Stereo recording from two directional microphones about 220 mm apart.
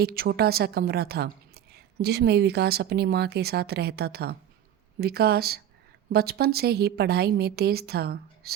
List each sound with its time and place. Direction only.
0.0 s a woman's voice: 45° right (ahead or behind)